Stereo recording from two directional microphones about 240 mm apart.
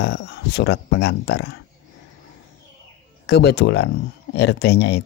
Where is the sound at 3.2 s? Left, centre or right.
Left.